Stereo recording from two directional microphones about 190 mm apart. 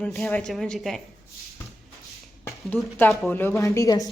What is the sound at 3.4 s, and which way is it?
Speech, 15° left (ahead or behind).